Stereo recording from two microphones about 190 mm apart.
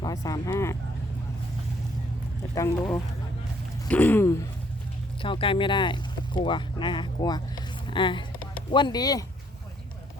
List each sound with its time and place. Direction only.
0.0 s speech: 20° left (ahead or behind)
2.6 s speech: 10° left (ahead or behind)
5.2 s speech: 25° left (ahead or behind)